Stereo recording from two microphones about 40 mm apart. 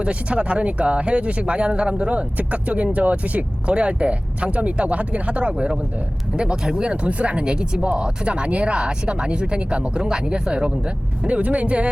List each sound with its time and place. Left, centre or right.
0.0 s speech: right